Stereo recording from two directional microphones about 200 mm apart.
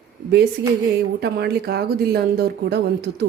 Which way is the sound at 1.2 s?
55° right (ahead or behind).